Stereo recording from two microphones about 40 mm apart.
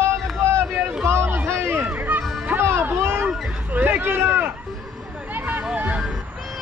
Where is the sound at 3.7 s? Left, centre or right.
Right.